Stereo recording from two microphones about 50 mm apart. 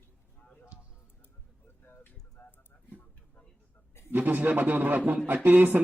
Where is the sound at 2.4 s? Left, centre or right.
Left.